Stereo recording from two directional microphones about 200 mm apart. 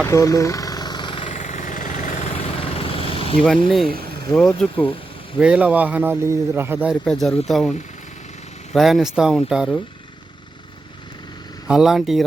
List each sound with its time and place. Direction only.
0.0 s vehicle: 15° left (ahead or behind)
1.4 s vehicle: 35° left (ahead or behind)
2.3 s vehicle: 30° left (ahead or behind)
3.8 s vehicle: 50° right (ahead or behind)
4.4 s a man's voice: 5° left (ahead or behind)
7.0 s speech: 5° left (ahead or behind)
11.7 s speech: centre (ahead or behind)